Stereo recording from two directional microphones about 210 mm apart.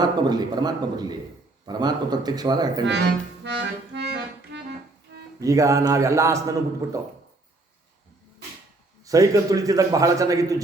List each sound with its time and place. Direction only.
0.0 s a man's voice: 20° right (ahead or behind)
2.8 s accordion: 55° right (ahead or behind)
5.4 s a man's voice: 15° right (ahead or behind)
9.0 s a man's voice: 15° right (ahead or behind)